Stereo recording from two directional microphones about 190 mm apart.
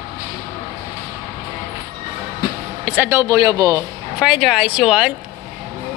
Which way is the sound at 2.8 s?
10° right (ahead or behind).